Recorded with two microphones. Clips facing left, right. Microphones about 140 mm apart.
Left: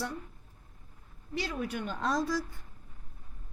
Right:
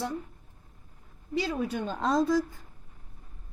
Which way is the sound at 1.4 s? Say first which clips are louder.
Right 4 dB; 25° right (ahead or behind).